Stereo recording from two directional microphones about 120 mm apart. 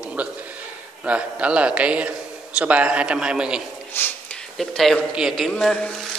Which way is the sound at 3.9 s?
20° left (ahead or behind).